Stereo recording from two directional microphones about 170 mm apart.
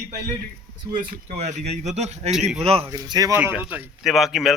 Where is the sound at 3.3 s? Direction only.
10° right (ahead or behind).